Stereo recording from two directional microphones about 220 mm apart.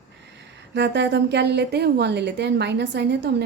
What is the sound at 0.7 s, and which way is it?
A woman's voice, 50° right (ahead or behind).